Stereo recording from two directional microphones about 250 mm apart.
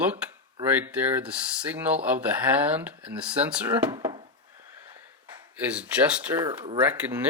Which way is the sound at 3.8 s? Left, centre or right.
Centre.